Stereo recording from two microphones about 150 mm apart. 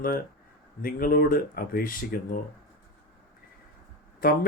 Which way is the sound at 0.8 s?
75° left (ahead or behind).